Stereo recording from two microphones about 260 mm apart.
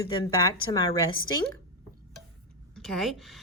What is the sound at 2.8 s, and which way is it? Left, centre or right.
Speech, centre.